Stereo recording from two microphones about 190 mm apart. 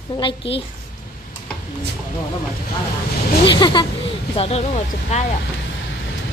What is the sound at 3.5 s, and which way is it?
Speech, 25° left (ahead or behind).